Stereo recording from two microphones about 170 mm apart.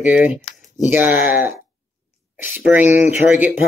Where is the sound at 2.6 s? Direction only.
10° right (ahead or behind).